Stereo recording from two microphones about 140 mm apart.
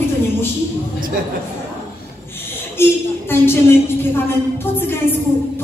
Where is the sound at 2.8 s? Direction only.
15° left (ahead or behind).